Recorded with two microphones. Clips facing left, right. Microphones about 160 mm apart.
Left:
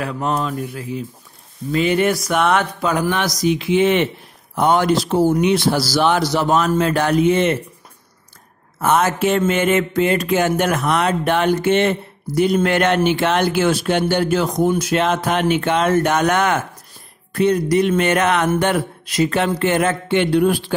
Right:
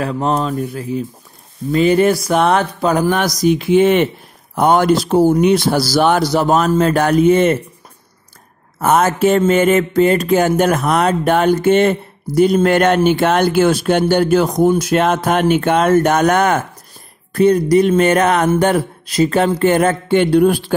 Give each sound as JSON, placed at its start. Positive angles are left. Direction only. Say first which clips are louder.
{"t": 0.0, "sound": "speech", "louder": "right 4 dB", "side_deg": -35}
{"t": 8.7, "sound": "speech", "louder": "right 3 dB", "side_deg": -45}